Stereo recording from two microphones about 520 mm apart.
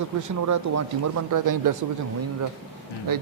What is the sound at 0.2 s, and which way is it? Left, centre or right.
Speech, right.